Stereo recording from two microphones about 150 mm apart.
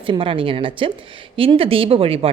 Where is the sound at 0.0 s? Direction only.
35° right (ahead or behind).